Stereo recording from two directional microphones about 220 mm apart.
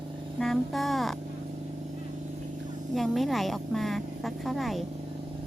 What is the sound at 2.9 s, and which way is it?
Speech, centre (ahead or behind).